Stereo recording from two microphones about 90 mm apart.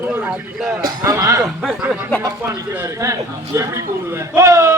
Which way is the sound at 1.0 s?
35° right (ahead or behind).